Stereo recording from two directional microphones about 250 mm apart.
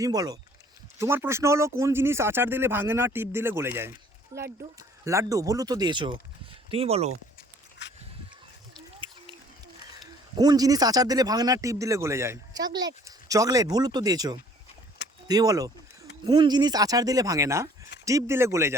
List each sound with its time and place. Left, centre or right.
0.0 s speech: centre
7.8 s a sound: left
10.3 s speech: centre